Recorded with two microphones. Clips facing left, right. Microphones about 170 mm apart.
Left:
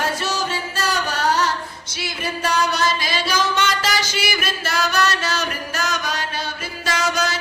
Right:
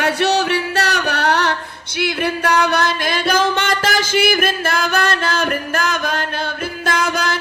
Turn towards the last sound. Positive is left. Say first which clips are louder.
# right 3 dB
turn(degrees=-55)  # may be behind; listen again after turning